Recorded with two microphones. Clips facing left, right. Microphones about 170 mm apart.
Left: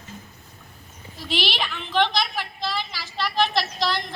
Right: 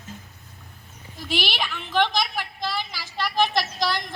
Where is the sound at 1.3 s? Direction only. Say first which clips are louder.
Left 1 dB; 10° right (ahead or behind).